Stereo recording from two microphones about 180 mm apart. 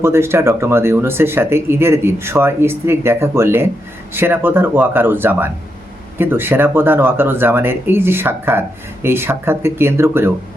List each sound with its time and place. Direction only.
0.0 s speech: 15° right (ahead or behind)